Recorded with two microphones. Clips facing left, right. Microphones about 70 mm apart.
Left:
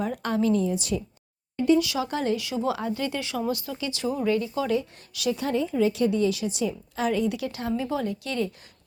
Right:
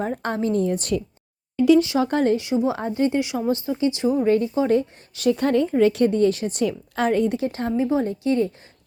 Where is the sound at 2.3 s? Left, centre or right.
Right.